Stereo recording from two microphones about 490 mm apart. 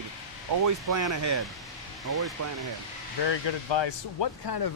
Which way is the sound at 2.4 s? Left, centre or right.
Right.